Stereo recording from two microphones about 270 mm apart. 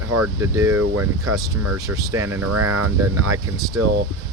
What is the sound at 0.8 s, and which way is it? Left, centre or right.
Speech, right.